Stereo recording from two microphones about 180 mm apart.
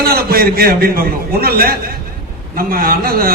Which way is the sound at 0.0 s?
60° right (ahead or behind).